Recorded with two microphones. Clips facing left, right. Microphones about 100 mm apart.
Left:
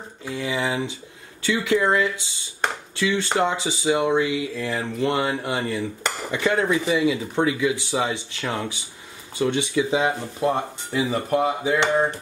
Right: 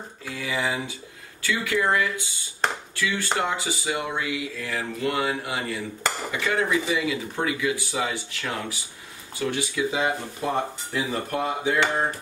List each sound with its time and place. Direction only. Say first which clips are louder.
0.2 s speech: left 3 dB; 25° left (ahead or behind)
10.4 s speech: left 4 dB; 10° left (ahead or behind)